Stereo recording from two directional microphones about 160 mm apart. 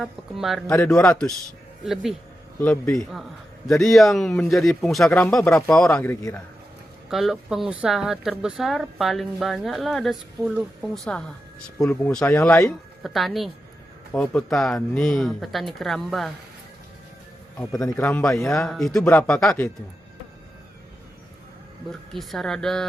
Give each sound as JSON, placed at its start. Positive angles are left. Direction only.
{"t": 0.0, "sound": "a woman's voice", "side_deg": 0}
{"t": 5.5, "sound": "speech", "side_deg": 15}
{"t": 5.7, "sound": "speech", "side_deg": 5}
{"t": 7.1, "sound": "a woman's voice", "side_deg": 0}
{"t": 11.8, "sound": "speech", "side_deg": 10}
{"t": 13.0, "sound": "a woman's voice", "side_deg": 0}
{"t": 17.6, "sound": "a woman's voice", "side_deg": 5}
{"t": 22.1, "sound": "a woman's voice", "side_deg": 0}